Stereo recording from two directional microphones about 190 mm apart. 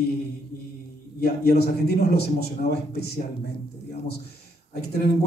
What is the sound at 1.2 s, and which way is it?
A man's voice, 55° left (ahead or behind).